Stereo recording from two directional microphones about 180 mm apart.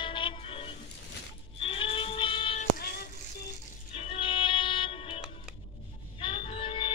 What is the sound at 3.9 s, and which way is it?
Music, 30° left (ahead or behind).